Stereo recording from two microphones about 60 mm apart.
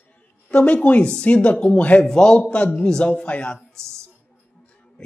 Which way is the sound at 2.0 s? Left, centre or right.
Centre.